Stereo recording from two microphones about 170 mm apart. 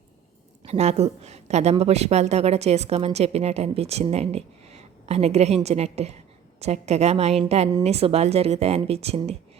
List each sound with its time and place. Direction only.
0.6 s a woman's voice: 40° right (ahead or behind)